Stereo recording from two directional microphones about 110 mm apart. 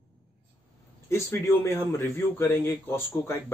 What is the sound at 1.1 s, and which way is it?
Speech, 25° left (ahead or behind).